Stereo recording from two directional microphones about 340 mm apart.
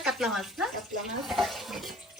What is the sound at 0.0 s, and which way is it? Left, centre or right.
A woman's voice, centre.